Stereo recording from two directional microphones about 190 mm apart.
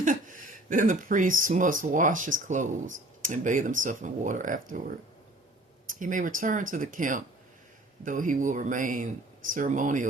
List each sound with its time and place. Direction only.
0.0 s speech: 45° right (ahead or behind)
5.9 s speech: 45° right (ahead or behind)